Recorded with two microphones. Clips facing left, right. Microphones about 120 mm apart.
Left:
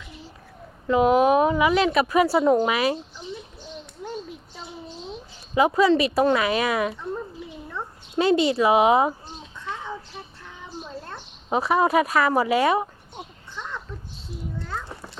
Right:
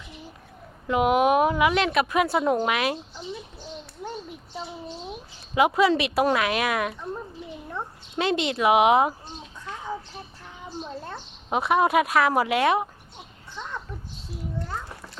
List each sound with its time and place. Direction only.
0.9 s speech: 5° right (ahead or behind)
4.0 s a sound: 20° right (ahead or behind)
5.0 s speech: 10° right (ahead or behind)
8.1 s speech: 5° left (ahead or behind)
11.4 s speech: centre (ahead or behind)